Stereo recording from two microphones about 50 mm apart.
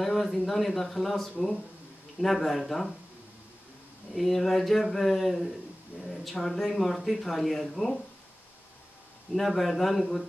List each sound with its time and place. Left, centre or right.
0.0 s speech: centre
4.1 s speech: centre
9.3 s speech: centre